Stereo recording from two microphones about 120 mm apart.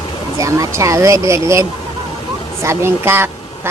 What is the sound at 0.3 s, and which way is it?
A woman's voice, 25° right (ahead or behind).